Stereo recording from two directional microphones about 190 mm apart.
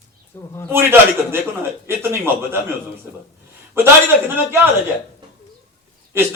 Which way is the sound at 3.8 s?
10° right (ahead or behind).